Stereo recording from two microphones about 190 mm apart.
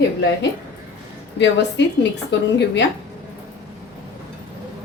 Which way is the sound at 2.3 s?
65° left (ahead or behind).